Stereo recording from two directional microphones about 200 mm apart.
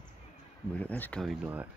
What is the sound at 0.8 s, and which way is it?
Speech, 10° left (ahead or behind).